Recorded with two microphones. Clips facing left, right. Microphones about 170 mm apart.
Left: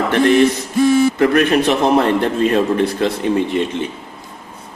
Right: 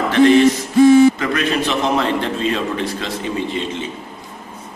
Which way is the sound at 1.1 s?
60° left (ahead or behind).